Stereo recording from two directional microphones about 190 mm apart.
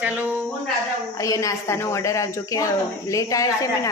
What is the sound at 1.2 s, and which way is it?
Speech, 15° left (ahead or behind).